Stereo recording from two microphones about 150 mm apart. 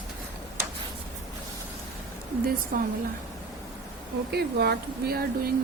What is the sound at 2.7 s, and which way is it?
Speech, 85° right.